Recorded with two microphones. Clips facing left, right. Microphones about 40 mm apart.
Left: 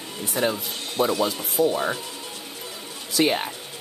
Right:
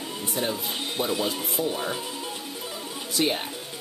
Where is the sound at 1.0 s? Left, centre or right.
Left.